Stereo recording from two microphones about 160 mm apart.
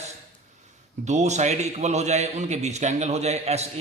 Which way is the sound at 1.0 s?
45° right (ahead or behind).